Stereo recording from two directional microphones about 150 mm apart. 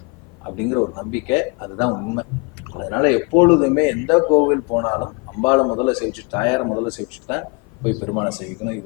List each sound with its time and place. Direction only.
0.4 s a man's voice: 20° left (ahead or behind)